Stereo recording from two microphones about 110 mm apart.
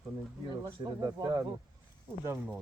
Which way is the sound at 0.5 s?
35° right (ahead or behind).